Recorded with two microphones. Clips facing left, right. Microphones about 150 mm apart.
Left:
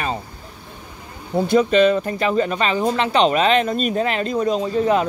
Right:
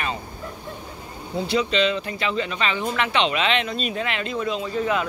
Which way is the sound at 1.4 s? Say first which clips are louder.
Left 7 dB; 50° left (ahead or behind).